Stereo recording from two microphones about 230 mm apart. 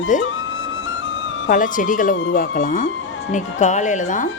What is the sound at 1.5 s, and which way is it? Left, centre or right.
Speech, left.